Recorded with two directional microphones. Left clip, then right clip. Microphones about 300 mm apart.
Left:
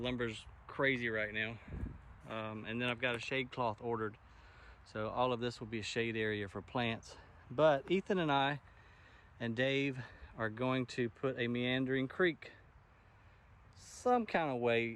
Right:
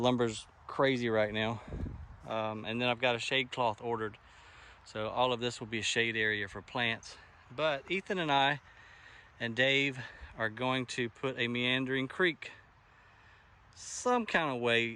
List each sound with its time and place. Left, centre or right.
0.0 s speech: centre
2.2 s speech: centre
14.1 s speech: centre